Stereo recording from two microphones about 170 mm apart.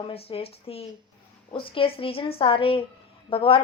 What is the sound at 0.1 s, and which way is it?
A woman's voice, 35° left (ahead or behind).